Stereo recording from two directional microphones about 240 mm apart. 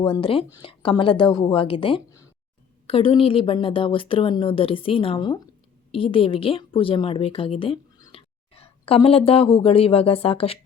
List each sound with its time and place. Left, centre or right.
0.0 s a woman's voice: left